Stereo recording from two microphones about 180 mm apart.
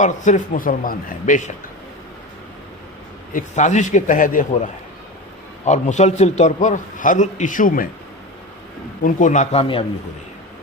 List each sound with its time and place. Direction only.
0.0 s a man's voice: 45° left (ahead or behind)
3.3 s a man's voice: 40° left (ahead or behind)
9.0 s a man's voice: 45° left (ahead or behind)